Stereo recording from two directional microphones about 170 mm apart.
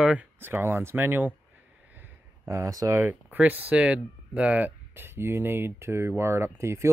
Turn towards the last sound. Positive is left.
turn(degrees=-15)  # may be behind; listen again after turning